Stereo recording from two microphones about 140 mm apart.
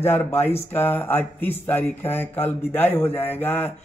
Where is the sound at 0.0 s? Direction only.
15° left (ahead or behind).